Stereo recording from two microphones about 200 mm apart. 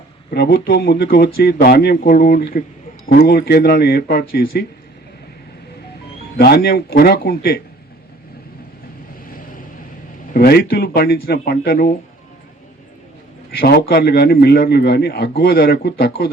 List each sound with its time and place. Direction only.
0.3 s a man's voice: 50° left (ahead or behind)
6.3 s a man's voice: 50° left (ahead or behind)
10.3 s a man's voice: 50° left (ahead or behind)
13.6 s a man's voice: 50° left (ahead or behind)